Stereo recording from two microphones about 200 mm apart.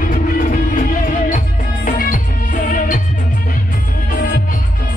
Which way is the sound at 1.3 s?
45° left (ahead or behind).